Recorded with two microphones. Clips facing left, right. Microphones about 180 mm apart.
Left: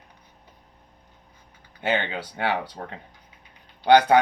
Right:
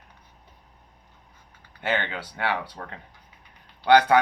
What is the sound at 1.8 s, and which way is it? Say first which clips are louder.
Speech: left 2 dB; 20° left (ahead or behind).